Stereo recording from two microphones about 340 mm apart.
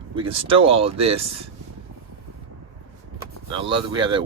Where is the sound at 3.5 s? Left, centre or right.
Centre.